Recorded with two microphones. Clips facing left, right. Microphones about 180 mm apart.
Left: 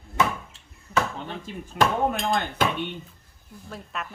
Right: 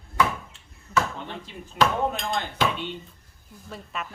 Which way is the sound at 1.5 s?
50° left (ahead or behind).